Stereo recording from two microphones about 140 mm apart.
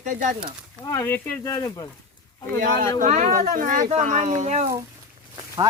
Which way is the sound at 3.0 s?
65° right (ahead or behind).